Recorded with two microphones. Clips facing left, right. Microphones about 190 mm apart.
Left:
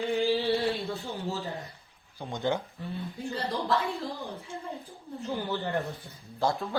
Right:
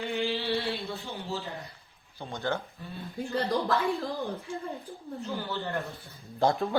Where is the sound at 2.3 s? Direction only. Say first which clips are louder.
Left 3 dB; 15° left (ahead or behind).